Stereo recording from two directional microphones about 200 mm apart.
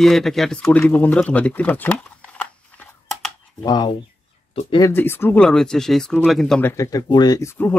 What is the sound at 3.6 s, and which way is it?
Speech, 20° left (ahead or behind).